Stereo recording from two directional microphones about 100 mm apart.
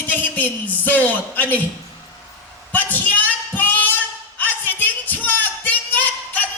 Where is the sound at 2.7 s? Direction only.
20° left (ahead or behind).